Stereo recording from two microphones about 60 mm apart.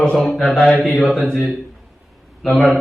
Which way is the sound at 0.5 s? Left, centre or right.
Left.